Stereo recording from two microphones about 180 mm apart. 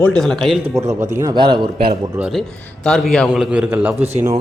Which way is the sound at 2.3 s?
5° left (ahead or behind).